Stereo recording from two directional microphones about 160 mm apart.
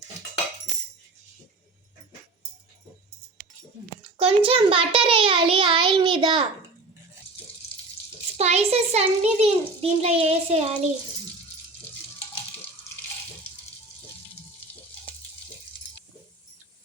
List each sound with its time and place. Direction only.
4.2 s a child's voice: 35° right (ahead or behind)
8.4 s a child's voice: 40° right (ahead or behind)